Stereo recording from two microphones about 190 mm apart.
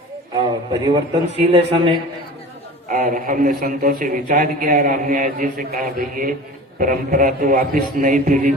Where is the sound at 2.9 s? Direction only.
40° right (ahead or behind).